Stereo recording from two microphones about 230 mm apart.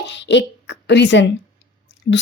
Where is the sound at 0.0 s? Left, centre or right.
Left.